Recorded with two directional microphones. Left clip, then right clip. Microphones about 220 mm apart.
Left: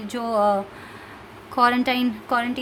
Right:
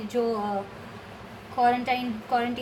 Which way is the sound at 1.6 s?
50° left (ahead or behind).